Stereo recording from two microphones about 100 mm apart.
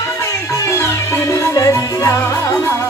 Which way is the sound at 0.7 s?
25° left (ahead or behind).